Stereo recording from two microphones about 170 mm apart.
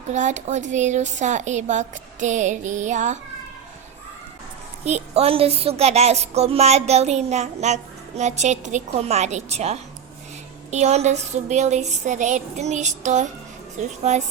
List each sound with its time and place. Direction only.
0.1 s speech: 45° right (ahead or behind)
4.9 s a sound: 40° right (ahead or behind)
8.2 s speech: 45° right (ahead or behind)